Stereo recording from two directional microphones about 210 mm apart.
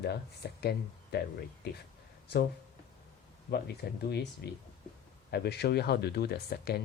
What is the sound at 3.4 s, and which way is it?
Speech, 50° left (ahead or behind).